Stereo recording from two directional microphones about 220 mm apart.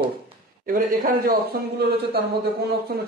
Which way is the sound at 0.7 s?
40° right (ahead or behind).